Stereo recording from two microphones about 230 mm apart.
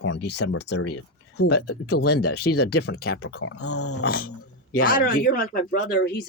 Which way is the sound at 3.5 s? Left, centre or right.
Left.